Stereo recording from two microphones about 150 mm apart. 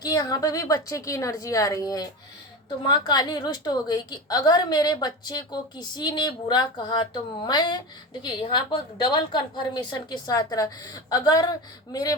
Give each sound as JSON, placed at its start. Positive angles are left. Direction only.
{"t": 0.0, "sound": "a woman's voice", "side_deg": 25}